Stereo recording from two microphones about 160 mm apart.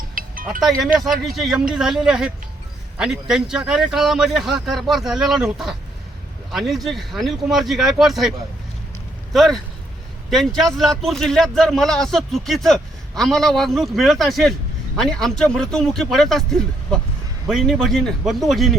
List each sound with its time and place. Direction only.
0.1 s music: 60° right (ahead or behind)
0.9 s speech: centre (ahead or behind)
9.3 s speech: centre (ahead or behind)